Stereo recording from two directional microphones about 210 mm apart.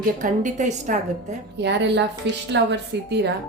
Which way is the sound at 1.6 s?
55° right (ahead or behind).